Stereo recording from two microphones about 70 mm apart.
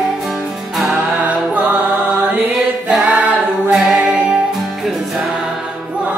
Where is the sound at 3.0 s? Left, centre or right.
Centre.